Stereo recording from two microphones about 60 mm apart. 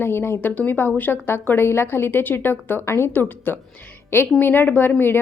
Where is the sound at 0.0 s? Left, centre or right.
Left.